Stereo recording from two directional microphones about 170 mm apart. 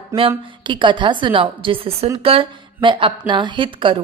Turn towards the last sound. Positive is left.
turn(degrees=-30)  # may be behind; listen again after turning